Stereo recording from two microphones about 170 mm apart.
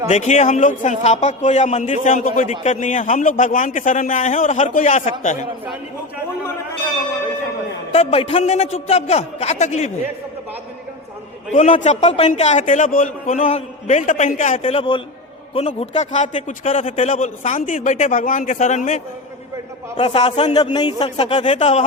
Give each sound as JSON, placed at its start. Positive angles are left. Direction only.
{"t": 0.1, "sound": "speech", "side_deg": 40}
{"t": 7.9, "sound": "a man's voice", "side_deg": 35}
{"t": 11.5, "sound": "speech", "side_deg": 40}
{"t": 14.6, "sound": "a man's voice", "side_deg": 30}